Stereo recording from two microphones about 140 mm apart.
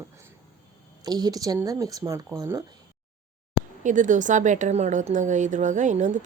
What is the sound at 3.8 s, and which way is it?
A woman's voice, 65° right (ahead or behind).